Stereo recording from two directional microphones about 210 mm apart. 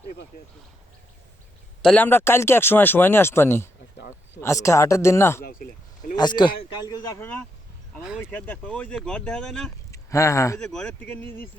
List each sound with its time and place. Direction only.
1.8 s speech: 5° left (ahead or behind)
8.0 s speech: 5° right (ahead or behind)
9.9 s speech: 15° left (ahead or behind)
10.6 s speech: 5° left (ahead or behind)